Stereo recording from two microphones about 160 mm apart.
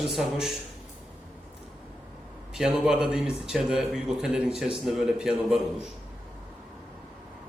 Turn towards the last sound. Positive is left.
turn(degrees=-5)  # may be behind; listen again after turning